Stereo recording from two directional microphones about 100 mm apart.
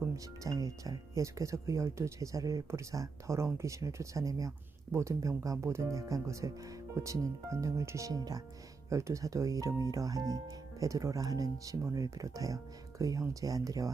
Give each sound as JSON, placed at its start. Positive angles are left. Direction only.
{"t": 0.4, "sound": "speech", "side_deg": -35}